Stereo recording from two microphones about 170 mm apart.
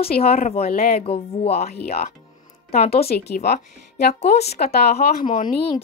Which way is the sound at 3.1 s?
65° left (ahead or behind).